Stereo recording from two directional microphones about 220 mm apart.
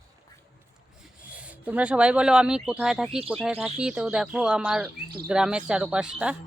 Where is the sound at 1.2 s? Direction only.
5° right (ahead or behind).